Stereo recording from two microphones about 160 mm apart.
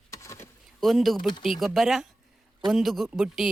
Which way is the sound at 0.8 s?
Centre (ahead or behind).